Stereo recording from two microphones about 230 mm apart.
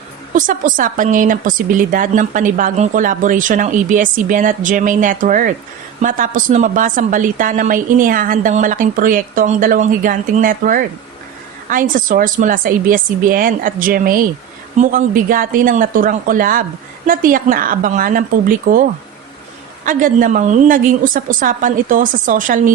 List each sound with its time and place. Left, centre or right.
0.3 s a woman's voice: right